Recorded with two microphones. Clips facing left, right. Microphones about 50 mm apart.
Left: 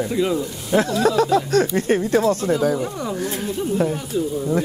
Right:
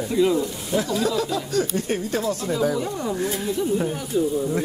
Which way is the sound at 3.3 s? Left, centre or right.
Left.